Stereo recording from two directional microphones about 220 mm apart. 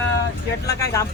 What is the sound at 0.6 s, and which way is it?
Speech, 15° left (ahead or behind).